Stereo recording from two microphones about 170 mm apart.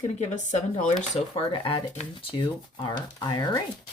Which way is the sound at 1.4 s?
30° left (ahead or behind).